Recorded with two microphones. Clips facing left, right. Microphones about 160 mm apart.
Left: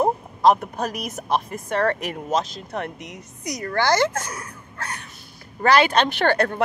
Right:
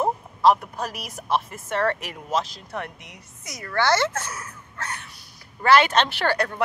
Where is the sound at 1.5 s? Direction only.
40° left (ahead or behind).